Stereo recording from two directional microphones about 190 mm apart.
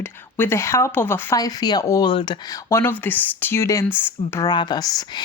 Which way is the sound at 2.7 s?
10° left (ahead or behind).